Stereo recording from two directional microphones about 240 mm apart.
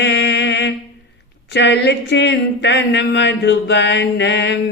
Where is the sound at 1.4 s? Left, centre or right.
Left.